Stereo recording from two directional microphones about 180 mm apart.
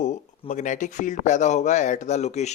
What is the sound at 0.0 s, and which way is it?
Speech, 45° left (ahead or behind).